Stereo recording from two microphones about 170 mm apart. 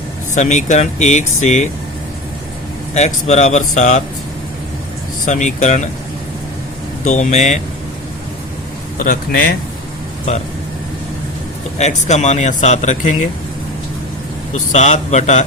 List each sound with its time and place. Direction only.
0.3 s speech: 45° left (ahead or behind)
2.9 s speech: 40° left (ahead or behind)
5.2 s speech: 45° left (ahead or behind)
7.0 s speech: 45° left (ahead or behind)
9.0 s a man's voice: 55° left (ahead or behind)
10.3 s speech: 40° left (ahead or behind)
11.8 s speech: 40° left (ahead or behind)
14.5 s speech: 45° left (ahead or behind)